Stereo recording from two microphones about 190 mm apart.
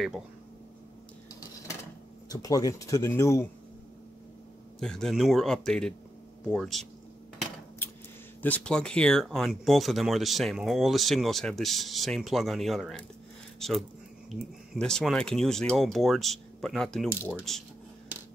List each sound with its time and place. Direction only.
2.2 s speech: 20° left (ahead or behind)
4.7 s speech: 5° left (ahead or behind)
8.4 s speech: 10° left (ahead or behind)